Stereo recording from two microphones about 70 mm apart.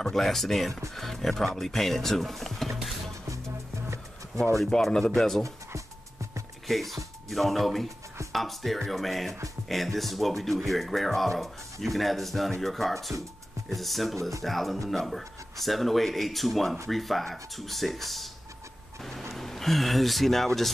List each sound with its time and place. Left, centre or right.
0.0 s speech: centre
3.1 s music: right
4.6 s speech: centre
6.7 s speech: centre